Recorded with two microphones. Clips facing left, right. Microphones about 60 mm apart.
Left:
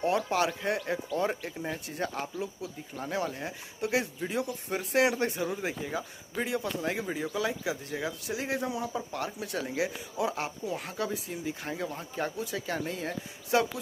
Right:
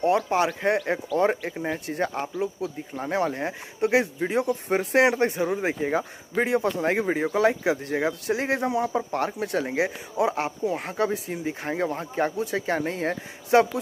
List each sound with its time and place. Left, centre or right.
0.0 s speech: right